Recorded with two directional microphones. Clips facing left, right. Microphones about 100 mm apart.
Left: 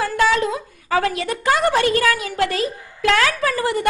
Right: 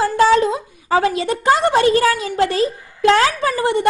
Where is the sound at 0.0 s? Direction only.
30° right (ahead or behind).